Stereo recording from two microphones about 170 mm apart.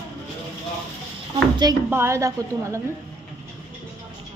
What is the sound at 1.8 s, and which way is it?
Speech, 15° right (ahead or behind).